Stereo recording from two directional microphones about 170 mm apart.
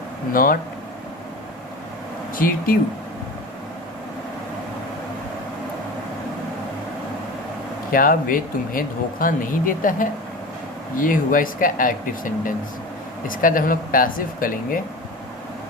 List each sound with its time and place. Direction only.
0.3 s speech: 55° left (ahead or behind)
2.3 s speech: 55° left (ahead or behind)
7.9 s speech: 55° left (ahead or behind)